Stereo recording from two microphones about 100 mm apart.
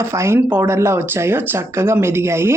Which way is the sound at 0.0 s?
25° right (ahead or behind).